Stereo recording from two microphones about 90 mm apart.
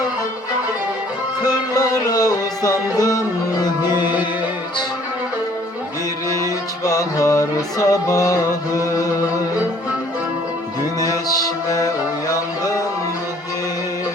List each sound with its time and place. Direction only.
1.7 s music: 40° left (ahead or behind)
3.9 s music: 20° right (ahead or behind)
6.8 s music: 40° left (ahead or behind)
11.0 s music: 40° left (ahead or behind)